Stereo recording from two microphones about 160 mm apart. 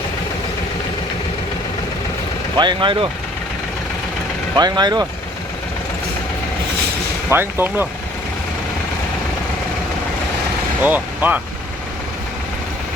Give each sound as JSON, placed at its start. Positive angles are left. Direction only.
{"t": 2.6, "sound": "speech", "side_deg": -30}
{"t": 4.5, "sound": "speech", "side_deg": -25}
{"t": 7.3, "sound": "speech", "side_deg": -15}
{"t": 10.8, "sound": "speech", "side_deg": -10}